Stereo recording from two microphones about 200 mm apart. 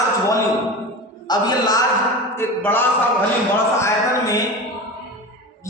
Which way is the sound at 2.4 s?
10° left (ahead or behind).